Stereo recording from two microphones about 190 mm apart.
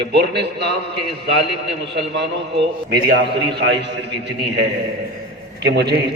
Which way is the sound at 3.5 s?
65° right (ahead or behind).